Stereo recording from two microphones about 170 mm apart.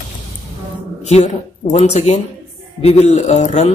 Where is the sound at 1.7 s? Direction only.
40° left (ahead or behind).